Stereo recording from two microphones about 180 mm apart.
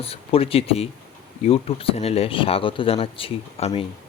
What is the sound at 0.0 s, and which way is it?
Speech, 30° left (ahead or behind).